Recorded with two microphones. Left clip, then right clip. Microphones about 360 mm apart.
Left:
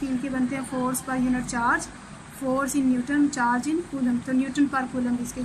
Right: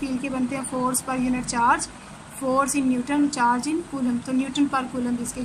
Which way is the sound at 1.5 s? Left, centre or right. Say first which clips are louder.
Right 5 dB; centre.